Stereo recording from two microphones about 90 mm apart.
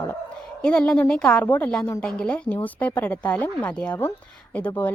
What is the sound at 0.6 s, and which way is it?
A woman's voice, 10° left (ahead or behind).